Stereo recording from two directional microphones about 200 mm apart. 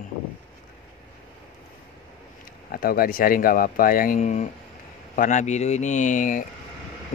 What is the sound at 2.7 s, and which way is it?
Speech, 50° left (ahead or behind).